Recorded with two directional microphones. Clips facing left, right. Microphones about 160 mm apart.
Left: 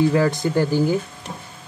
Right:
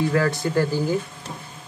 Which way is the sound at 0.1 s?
20° left (ahead or behind).